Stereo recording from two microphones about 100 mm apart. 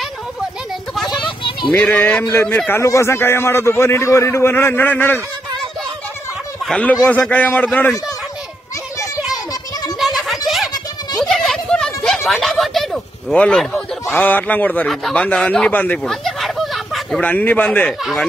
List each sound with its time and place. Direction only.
1.1 s children playing: 55° left (ahead or behind)
1.7 s speech: 15° left (ahead or behind)
2.7 s a man's voice: 30° left (ahead or behind)
7.1 s speech: 15° left (ahead or behind)
8.9 s children playing: 30° left (ahead or behind)
9.5 s a sound: 40° left (ahead or behind)
9.9 s a sound: centre (ahead or behind)
14.1 s speech: 15° left (ahead or behind)
16.0 s a sound: centre (ahead or behind)
17.2 s speech: 15° left (ahead or behind)
17.8 s speech: 5° left (ahead or behind)